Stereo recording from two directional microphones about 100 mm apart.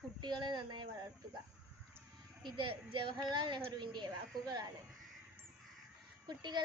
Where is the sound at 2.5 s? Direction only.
55° right (ahead or behind).